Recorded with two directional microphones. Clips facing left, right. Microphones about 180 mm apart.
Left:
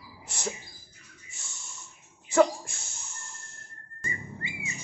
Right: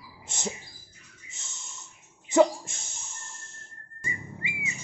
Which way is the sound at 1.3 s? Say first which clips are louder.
Right 1 dB; 20° right (ahead or behind).